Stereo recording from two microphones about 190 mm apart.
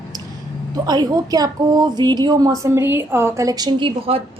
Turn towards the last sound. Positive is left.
turn(degrees=-25)  # may be behind; listen again after turning